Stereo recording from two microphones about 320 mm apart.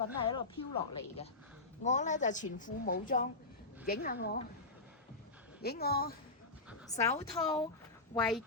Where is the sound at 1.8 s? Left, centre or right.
Left.